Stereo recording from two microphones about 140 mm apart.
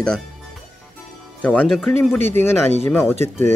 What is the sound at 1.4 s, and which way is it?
Speech, 10° left (ahead or behind).